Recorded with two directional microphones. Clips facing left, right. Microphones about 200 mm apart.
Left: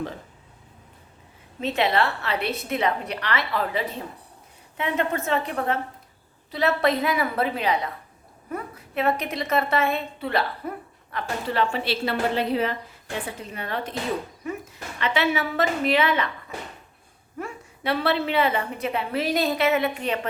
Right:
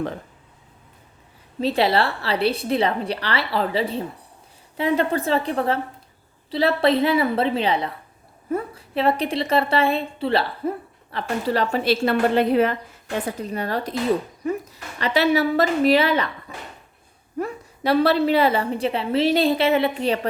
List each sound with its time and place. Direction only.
1.6 s a woman's voice: 35° right (ahead or behind); by 12.7 s 55° right (ahead or behind)
13.2 s a woman's voice: 40° right (ahead or behind)
17.3 s a woman's voice: 40° right (ahead or behind)